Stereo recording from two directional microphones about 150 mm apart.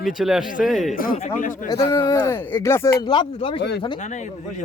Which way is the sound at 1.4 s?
60° left (ahead or behind).